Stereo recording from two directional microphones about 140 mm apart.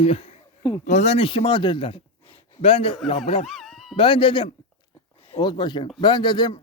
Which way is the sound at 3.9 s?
40° left (ahead or behind).